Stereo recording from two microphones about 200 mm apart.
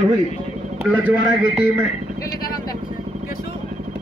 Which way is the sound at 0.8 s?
5° right (ahead or behind).